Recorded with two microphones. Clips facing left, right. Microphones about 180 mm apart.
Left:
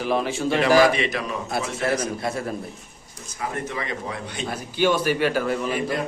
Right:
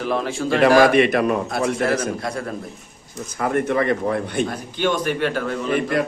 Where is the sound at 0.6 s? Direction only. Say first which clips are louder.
Right 5 dB; 60° right (ahead or behind).